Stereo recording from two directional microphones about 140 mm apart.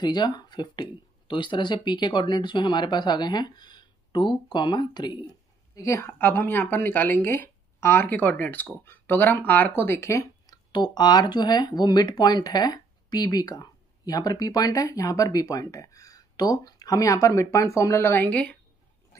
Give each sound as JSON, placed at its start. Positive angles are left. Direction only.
{"t": 0.0, "sound": "speech", "side_deg": 30}